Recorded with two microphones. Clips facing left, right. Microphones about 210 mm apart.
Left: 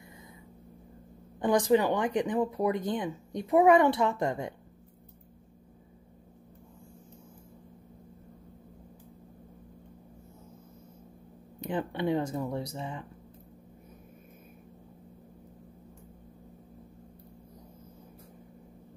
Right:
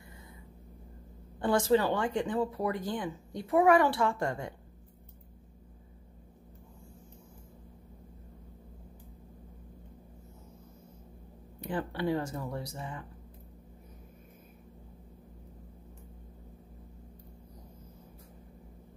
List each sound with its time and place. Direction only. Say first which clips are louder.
1.4 s speech: left 2 dB; 15° left (ahead or behind)
11.6 s speech: left 2 dB; 20° left (ahead or behind)